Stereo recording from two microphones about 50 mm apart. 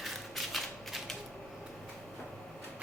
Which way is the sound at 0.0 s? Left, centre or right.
Centre.